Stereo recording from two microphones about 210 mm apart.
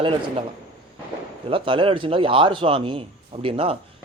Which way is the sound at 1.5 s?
25° right (ahead or behind).